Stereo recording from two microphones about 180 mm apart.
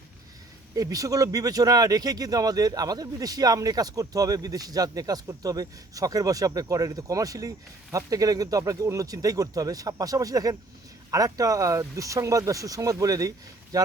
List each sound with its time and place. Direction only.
0.8 s speech: 20° right (ahead or behind)